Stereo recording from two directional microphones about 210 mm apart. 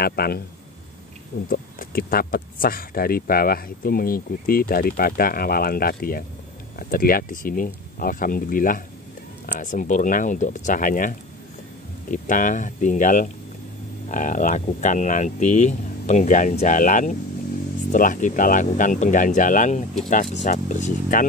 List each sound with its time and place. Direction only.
0.0 s speech: 50° left (ahead or behind)
1.5 s speech: 45° left (ahead or behind)